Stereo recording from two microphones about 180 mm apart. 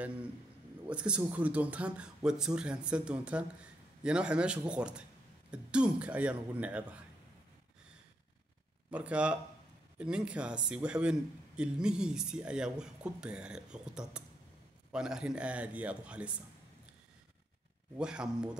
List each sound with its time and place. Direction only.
0.0 s a man's voice: 5° right (ahead or behind)
8.9 s a man's voice: 5° right (ahead or behind)
17.9 s a man's voice: 5° right (ahead or behind)